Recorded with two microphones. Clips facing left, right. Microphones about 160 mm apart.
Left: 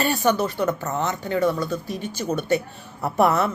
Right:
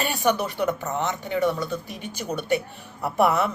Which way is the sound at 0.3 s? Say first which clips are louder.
Even; 15° right (ahead or behind).